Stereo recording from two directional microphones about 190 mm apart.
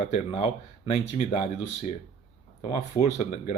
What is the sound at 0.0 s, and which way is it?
Speech, 30° left (ahead or behind).